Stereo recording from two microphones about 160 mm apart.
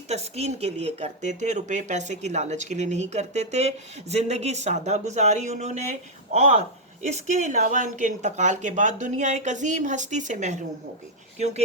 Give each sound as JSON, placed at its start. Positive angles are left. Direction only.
{"t": 0.1, "sound": "speech", "side_deg": -40}